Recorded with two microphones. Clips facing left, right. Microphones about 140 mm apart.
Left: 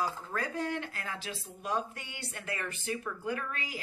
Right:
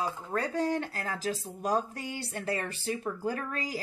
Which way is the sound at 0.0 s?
30° right (ahead or behind).